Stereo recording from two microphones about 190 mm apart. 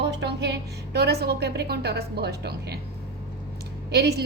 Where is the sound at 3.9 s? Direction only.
55° right (ahead or behind).